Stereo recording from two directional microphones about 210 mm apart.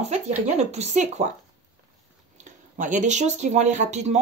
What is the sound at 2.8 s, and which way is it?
A woman's voice, 35° right (ahead or behind).